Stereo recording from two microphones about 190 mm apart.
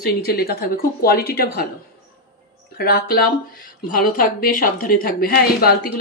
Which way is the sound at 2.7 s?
55° left (ahead or behind).